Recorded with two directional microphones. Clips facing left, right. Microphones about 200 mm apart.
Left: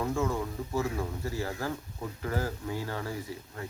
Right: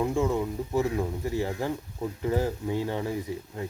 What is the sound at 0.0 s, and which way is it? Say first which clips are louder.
Speech: right 4 dB; 20° right (ahead or behind).